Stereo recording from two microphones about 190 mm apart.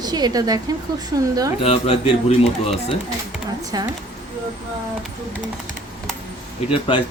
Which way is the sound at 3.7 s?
20° right (ahead or behind).